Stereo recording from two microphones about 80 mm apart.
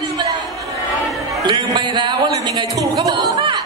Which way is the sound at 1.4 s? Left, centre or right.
Right.